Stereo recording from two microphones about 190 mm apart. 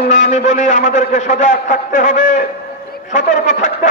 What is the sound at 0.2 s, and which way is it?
A man's voice, 40° left (ahead or behind).